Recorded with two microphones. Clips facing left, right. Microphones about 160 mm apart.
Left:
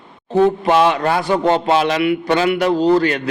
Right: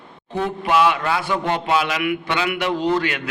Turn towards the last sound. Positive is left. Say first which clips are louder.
# left 6 dB
turn(degrees=35)  # may be behind; listen again after turning